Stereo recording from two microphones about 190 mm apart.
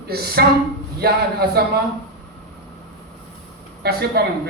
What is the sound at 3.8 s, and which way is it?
Speech, 55° right (ahead or behind).